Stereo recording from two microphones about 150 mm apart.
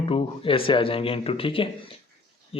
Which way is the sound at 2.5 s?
40° left (ahead or behind).